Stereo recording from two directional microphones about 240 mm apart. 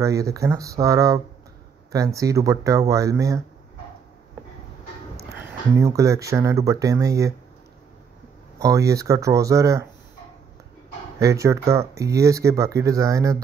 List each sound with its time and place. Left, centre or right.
0.0 s speech: centre
5.8 s speech: centre
8.5 s speech: centre
11.1 s speech: centre